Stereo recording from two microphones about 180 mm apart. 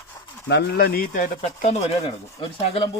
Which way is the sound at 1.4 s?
35° left (ahead or behind).